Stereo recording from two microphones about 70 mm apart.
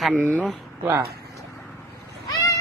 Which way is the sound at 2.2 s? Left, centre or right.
Left.